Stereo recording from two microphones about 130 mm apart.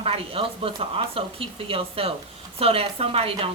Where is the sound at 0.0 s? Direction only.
45° right (ahead or behind).